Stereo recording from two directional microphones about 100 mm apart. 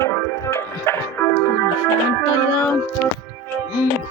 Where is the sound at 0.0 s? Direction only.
30° left (ahead or behind).